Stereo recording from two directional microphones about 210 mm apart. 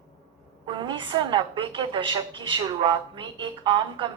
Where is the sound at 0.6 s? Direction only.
25° right (ahead or behind).